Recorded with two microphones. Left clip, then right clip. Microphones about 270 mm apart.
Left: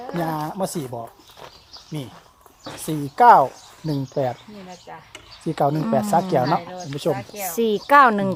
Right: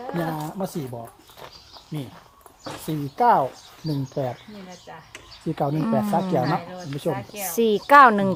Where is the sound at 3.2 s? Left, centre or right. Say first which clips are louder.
Left 6 dB; left.